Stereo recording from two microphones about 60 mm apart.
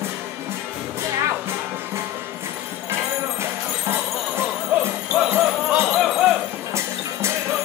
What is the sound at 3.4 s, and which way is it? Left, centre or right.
Jingle bell, right.